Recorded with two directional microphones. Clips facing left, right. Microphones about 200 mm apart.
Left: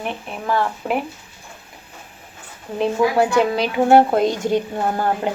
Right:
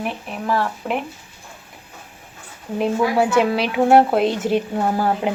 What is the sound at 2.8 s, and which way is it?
Speech, 5° right (ahead or behind).